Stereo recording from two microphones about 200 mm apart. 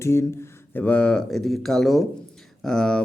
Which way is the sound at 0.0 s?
15° left (ahead or behind).